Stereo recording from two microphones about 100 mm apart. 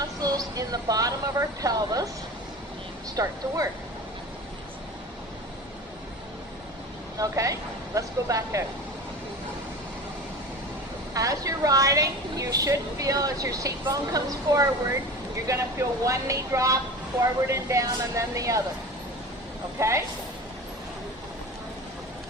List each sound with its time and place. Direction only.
0.2 s a woman's voice: 35° right (ahead or behind)
3.2 s a woman's voice: 35° right (ahead or behind)
7.2 s a woman's voice: 35° right (ahead or behind)
11.1 s a woman's voice: 35° right (ahead or behind)
19.8 s speech: 30° right (ahead or behind)